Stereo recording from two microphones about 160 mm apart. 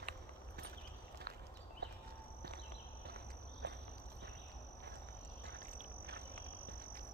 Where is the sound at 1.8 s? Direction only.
90° right.